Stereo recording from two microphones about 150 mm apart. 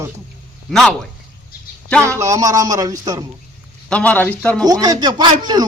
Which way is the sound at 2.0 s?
20° right (ahead or behind).